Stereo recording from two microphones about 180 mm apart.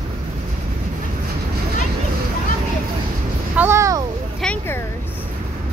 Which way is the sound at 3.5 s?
15° right (ahead or behind).